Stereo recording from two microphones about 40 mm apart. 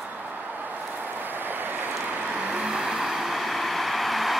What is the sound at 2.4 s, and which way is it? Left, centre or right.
Vehicle, right.